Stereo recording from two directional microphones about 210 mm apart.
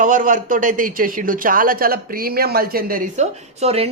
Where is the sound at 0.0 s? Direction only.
35° right (ahead or behind).